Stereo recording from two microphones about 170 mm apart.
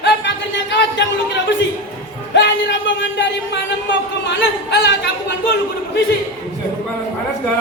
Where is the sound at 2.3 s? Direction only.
90° left.